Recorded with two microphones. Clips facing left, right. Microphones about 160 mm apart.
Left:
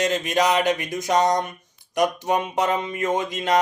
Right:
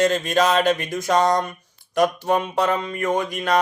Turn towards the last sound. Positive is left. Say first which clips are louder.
# right 1 dB
turn(degrees=20)  # may be behind; listen again after turning